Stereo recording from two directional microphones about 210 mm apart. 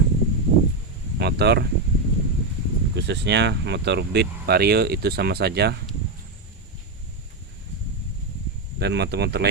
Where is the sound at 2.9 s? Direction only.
55° right (ahead or behind).